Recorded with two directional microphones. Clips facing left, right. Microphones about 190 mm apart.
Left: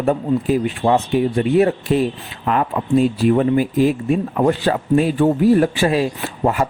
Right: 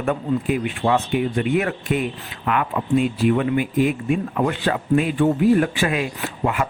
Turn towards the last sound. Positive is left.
turn(degrees=35)  # may be behind; listen again after turning